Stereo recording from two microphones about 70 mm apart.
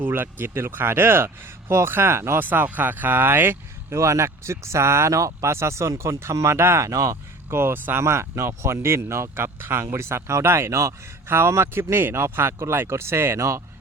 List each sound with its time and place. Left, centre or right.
0.0 s speech: right
7.5 s speech: right